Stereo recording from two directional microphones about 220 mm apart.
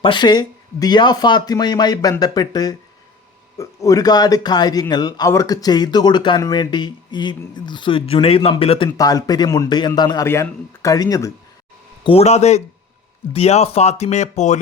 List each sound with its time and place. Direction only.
0.0 s a man's voice: 20° left (ahead or behind)
12.0 s speech: 30° left (ahead or behind)